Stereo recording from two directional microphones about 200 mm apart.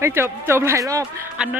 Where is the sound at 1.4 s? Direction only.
5° right (ahead or behind).